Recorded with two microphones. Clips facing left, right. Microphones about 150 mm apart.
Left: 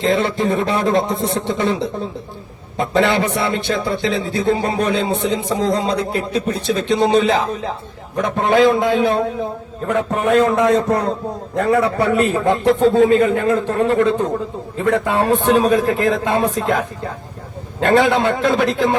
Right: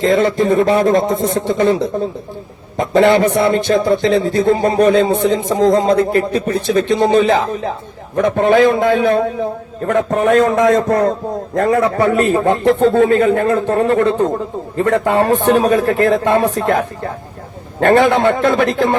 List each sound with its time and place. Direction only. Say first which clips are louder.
0.0 s a man's voice: right 4 dB; 45° right (ahead or behind)
2.7 s a man's voice: right 5 dB; 45° right (ahead or behind)
9.8 s a man's voice: right 4 dB; 45° right (ahead or behind)